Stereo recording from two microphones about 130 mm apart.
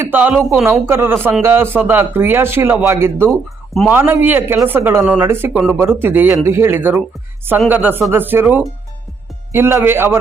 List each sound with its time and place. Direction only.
0.0 s speech: 15° right (ahead or behind)